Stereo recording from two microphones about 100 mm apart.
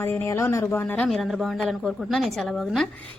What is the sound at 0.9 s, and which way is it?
A woman's voice, 10° left (ahead or behind).